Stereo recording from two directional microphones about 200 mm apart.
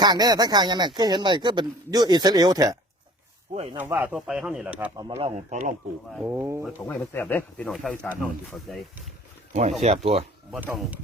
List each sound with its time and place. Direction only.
0.0 s speech: 20° right (ahead or behind)
3.5 s speech: 30° right (ahead or behind)
3.8 s speech: 10° right (ahead or behind)
4.9 s speech: 25° right (ahead or behind)
6.2 s speech: 15° right (ahead or behind)
6.8 s speech: 10° left (ahead or behind)
9.5 s speech: 35° right (ahead or behind)
10.5 s speech: centre (ahead or behind)